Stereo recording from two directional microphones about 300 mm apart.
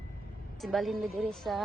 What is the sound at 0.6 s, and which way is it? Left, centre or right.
Speech, centre.